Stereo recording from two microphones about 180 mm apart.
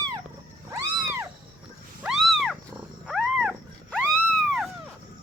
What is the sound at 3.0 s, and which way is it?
Wild animals, centre (ahead or behind).